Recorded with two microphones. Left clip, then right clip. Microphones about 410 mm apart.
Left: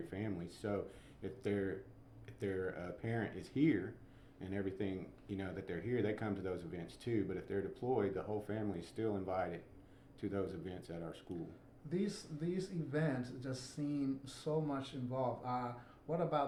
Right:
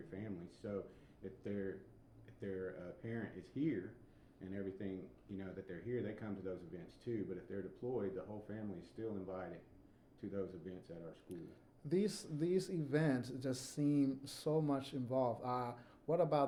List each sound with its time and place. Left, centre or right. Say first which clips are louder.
0.1 s a sound: left 5 dB; left
1.2 s speech: left 6 dB; left
11.9 s speech: right 3 dB; right